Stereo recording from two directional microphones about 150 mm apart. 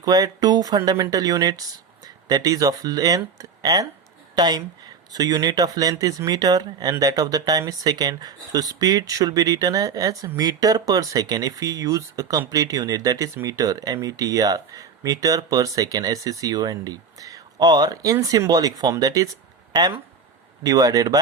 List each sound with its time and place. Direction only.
0.0 s speech: 25° right (ahead or behind)